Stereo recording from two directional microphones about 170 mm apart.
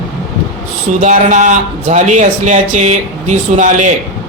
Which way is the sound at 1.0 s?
45° right (ahead or behind).